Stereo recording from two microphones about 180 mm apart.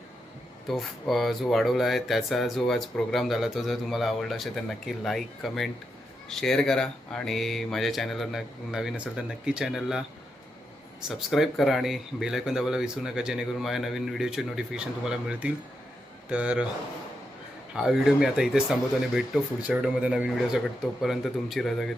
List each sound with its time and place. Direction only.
0.7 s speech: centre (ahead or behind)
11.1 s speech: centre (ahead or behind)
17.7 s speech: 5° right (ahead or behind)